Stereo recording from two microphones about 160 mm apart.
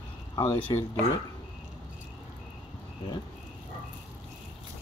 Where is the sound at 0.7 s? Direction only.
25° left (ahead or behind).